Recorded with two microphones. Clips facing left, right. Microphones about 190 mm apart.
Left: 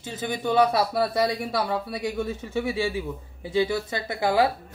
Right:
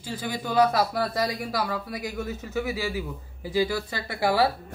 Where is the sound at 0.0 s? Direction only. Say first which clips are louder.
Left 3 dB; 20° left (ahead or behind).